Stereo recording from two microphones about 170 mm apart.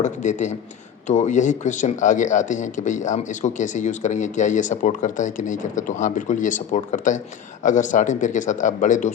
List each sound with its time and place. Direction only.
0.0 s speech: 45° left (ahead or behind)